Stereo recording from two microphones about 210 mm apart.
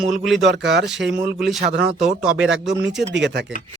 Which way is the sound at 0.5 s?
55° right (ahead or behind).